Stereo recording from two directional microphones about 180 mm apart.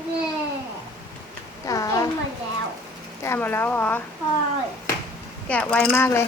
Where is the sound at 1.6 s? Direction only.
20° left (ahead or behind).